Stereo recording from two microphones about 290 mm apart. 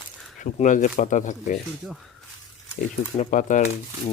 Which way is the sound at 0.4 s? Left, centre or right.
Left.